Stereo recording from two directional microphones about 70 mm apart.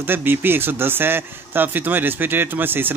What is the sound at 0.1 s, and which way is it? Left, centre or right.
Speech, right.